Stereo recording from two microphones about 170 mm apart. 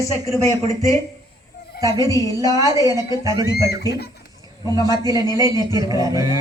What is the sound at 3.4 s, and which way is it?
Speech, 70° left (ahead or behind).